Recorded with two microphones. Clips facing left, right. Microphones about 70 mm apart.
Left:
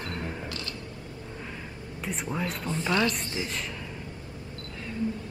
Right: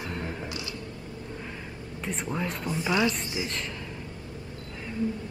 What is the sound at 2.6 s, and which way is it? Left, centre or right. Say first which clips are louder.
Speech: right 1 dB; centre.